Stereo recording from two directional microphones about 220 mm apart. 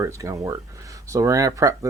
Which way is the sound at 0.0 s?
15° right (ahead or behind).